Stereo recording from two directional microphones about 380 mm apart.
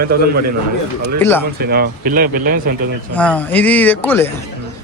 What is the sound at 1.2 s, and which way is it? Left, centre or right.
Speech, centre.